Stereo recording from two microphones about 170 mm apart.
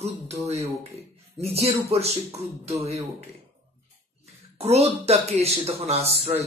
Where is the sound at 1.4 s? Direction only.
35° right (ahead or behind).